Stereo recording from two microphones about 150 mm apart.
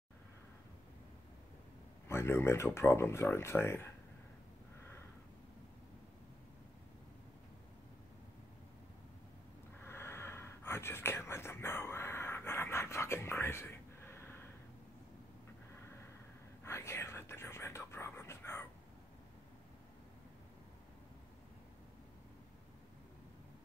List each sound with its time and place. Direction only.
2.0 s speech: 15° left (ahead or behind)
9.8 s whispering: 15° left (ahead or behind)
16.6 s whispering: 15° left (ahead or behind)